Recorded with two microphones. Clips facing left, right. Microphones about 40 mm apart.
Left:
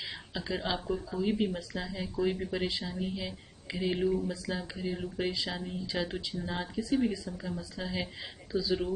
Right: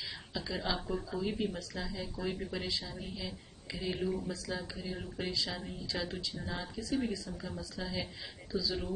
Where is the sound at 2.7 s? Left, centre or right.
Left.